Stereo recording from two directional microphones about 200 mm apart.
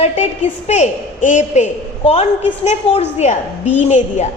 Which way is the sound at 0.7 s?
40° left (ahead or behind).